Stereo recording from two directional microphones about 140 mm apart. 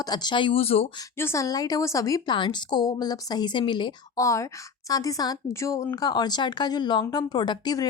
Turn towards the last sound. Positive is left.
turn(degrees=30)  # may be behind; listen again after turning